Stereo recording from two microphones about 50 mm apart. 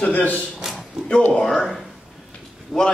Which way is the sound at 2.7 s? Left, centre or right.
Centre.